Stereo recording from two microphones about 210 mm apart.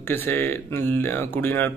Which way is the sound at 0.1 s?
10° left (ahead or behind).